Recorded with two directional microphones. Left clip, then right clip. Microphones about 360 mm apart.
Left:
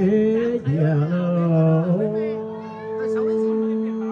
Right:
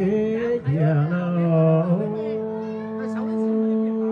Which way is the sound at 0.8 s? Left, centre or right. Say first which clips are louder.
Left 1 dB; left.